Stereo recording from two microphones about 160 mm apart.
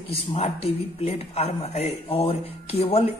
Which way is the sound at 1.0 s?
40° left (ahead or behind).